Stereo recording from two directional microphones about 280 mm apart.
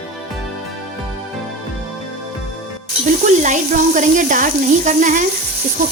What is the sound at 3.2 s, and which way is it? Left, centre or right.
A woman's voice, right.